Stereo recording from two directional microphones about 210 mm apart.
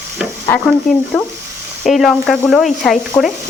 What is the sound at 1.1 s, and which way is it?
Speech, centre (ahead or behind).